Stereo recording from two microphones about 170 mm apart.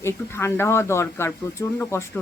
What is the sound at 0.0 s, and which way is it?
Speech, 15° left (ahead or behind).